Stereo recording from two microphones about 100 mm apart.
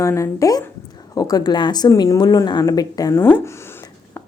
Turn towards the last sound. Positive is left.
turn(degrees=20)  # may be behind; listen again after turning